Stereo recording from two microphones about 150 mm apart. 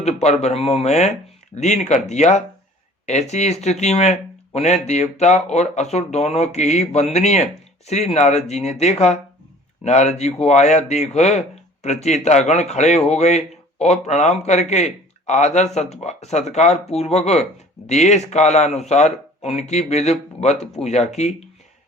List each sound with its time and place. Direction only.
0.0 s speech: 45° left (ahead or behind)